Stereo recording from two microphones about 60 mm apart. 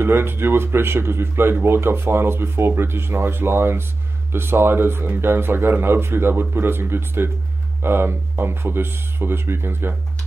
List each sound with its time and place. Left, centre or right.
0.0 s speech: right